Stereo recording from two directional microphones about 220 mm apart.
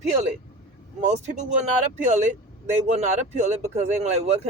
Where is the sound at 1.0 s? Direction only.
30° right (ahead or behind).